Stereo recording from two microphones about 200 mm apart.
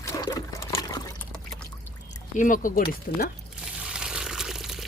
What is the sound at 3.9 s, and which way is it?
Water, 5° right (ahead or behind).